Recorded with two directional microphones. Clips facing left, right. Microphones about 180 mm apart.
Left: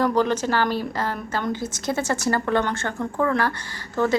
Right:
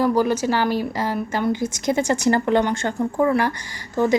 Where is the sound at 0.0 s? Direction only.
10° right (ahead or behind).